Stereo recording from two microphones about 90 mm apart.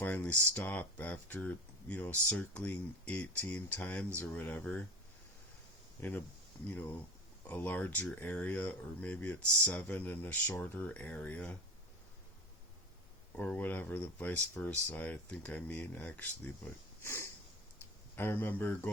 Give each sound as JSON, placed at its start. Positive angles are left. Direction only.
{"t": 0.0, "sound": "speech", "side_deg": 15}
{"t": 6.0, "sound": "speech", "side_deg": 20}
{"t": 13.3, "sound": "speech", "side_deg": 15}
{"t": 17.0, "sound": "sniff", "side_deg": 30}
{"t": 18.2, "sound": "speech", "side_deg": 25}